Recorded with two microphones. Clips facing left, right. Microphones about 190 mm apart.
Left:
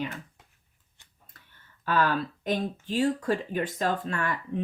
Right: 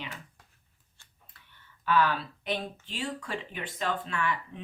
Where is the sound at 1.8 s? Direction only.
45° left (ahead or behind).